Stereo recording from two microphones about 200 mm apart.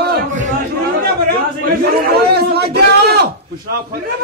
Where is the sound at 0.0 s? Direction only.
45° right (ahead or behind).